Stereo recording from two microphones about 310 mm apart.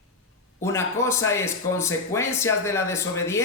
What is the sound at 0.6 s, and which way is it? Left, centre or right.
Speech, centre.